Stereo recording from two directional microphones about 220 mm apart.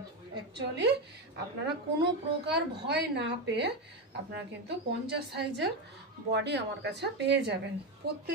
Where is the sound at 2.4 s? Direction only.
50° right (ahead or behind).